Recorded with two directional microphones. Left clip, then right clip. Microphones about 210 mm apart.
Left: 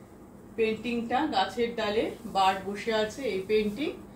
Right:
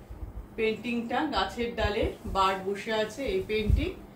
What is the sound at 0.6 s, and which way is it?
Speech, 20° right (ahead or behind).